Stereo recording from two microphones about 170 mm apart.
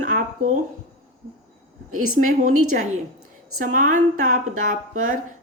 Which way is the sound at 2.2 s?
50° right (ahead or behind).